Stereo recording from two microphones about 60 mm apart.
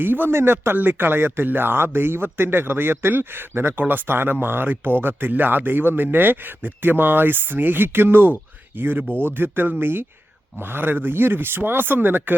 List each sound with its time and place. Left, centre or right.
0.0 s speech: right